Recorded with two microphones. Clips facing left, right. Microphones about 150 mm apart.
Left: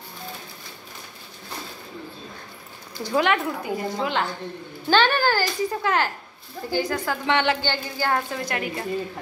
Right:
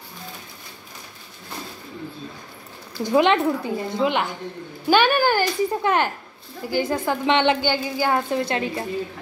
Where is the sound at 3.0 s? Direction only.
20° right (ahead or behind).